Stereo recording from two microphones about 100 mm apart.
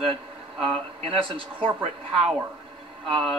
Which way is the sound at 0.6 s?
65° right (ahead or behind).